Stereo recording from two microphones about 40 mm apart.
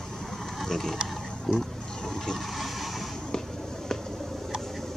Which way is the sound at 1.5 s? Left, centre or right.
Centre.